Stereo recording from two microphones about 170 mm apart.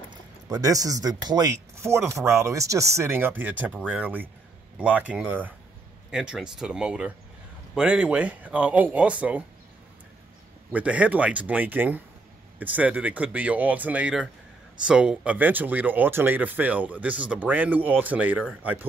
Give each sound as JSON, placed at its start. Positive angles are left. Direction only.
{"t": 0.1, "sound": "speech", "side_deg": -20}
{"t": 10.7, "sound": "speech", "side_deg": -10}